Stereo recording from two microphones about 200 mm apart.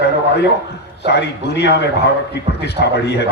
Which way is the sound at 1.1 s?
60° left (ahead or behind).